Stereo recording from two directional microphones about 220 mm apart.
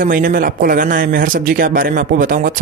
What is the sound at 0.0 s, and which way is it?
Speech, 40° right (ahead or behind).